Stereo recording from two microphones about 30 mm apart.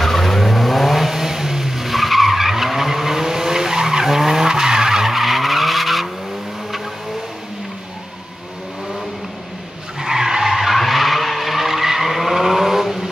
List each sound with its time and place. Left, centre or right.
0.0 s vehicle: centre
5.1 s vehicle: centre
9.9 s skidding: centre
10.5 s vehicle: centre